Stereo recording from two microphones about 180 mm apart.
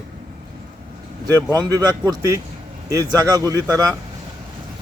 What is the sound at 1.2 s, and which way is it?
Speech, 20° right (ahead or behind).